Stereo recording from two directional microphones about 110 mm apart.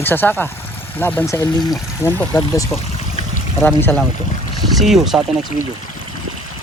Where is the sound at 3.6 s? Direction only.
20° left (ahead or behind).